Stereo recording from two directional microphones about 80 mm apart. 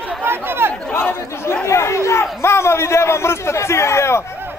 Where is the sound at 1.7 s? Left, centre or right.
Left.